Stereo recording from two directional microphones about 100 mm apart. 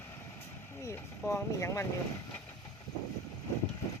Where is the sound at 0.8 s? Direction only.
25° left (ahead or behind).